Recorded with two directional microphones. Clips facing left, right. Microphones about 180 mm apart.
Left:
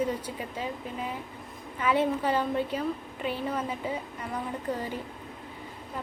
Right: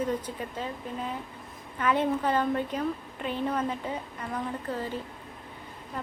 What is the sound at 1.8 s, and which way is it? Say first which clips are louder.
A woman's voice: even; 10° left (ahead or behind).